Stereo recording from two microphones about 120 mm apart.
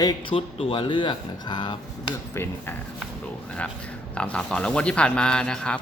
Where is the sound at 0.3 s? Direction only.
50° left (ahead or behind).